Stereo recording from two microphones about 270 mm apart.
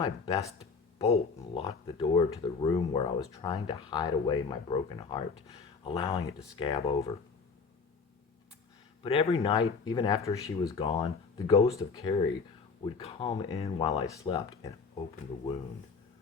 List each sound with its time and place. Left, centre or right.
0.0 s speech: centre
9.0 s speech: left